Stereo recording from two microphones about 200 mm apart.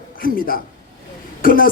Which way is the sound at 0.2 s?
45° left (ahead or behind).